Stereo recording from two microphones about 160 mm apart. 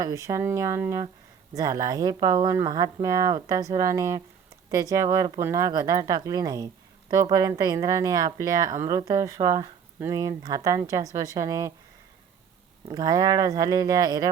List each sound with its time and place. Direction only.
0.0 s speech: 20° right (ahead or behind)
12.9 s speech: 25° right (ahead or behind)